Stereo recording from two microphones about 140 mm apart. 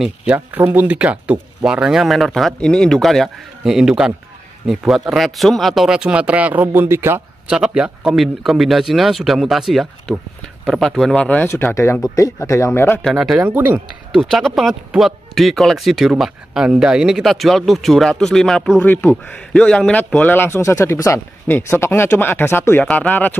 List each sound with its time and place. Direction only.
0.0 s a man's voice: 5° right (ahead or behind); by 13.0 s 20° left (ahead or behind)
13.0 s a man's voice: centre (ahead or behind)
13.4 s speech: 10° right (ahead or behind)
14.1 s a man's voice: centre (ahead or behind)
18.8 s a man's voice: 10° left (ahead or behind)